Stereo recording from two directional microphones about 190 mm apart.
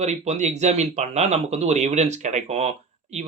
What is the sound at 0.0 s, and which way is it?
Speech, 35° right (ahead or behind).